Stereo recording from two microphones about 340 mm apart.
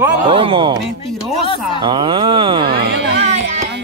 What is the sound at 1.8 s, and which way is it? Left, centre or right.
Speech, centre.